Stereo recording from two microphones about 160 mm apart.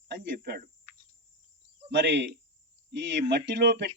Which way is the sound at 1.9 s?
90° right.